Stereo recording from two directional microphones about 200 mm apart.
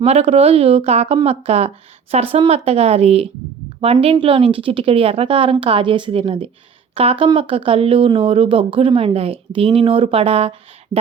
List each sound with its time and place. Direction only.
0.0 s speech: 30° right (ahead or behind)